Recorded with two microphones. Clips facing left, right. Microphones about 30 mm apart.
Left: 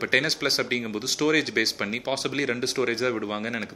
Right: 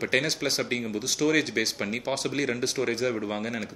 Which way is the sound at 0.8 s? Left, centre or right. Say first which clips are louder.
Left 1 dB; left.